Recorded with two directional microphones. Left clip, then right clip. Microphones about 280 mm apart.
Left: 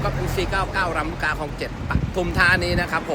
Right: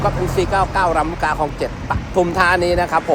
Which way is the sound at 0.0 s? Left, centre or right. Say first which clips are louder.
Right 7 dB; centre.